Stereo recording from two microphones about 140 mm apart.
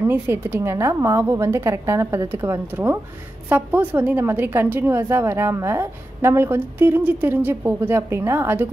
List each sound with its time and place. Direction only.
0.0 s a woman's voice: 15° right (ahead or behind)